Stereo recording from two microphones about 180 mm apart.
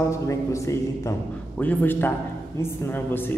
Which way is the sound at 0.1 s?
15° left (ahead or behind).